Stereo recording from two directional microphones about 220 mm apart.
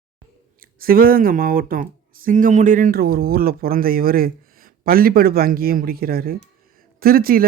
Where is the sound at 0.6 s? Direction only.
40° right (ahead or behind).